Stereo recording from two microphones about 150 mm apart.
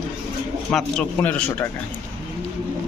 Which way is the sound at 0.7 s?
5° left (ahead or behind).